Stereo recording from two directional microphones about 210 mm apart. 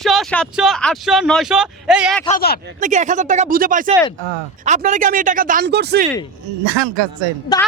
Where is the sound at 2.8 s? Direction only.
35° right (ahead or behind).